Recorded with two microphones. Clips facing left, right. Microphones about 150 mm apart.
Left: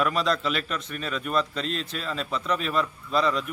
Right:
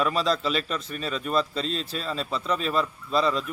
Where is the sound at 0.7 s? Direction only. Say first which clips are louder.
Right 1 dB; 30° right (ahead or behind).